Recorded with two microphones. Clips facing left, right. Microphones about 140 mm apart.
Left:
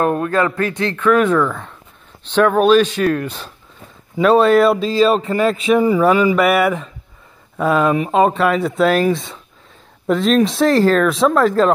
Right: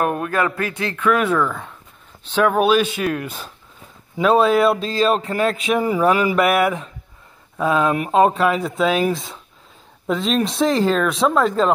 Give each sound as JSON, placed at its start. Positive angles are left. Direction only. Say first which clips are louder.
{"t": 0.2, "sound": "speech", "louder": "left 4 dB", "side_deg": -15}
{"t": 0.7, "sound": "speech", "louder": "left 5 dB", "side_deg": 30}
{"t": 2.3, "sound": "speech", "louder": "left 4 dB", "side_deg": -10}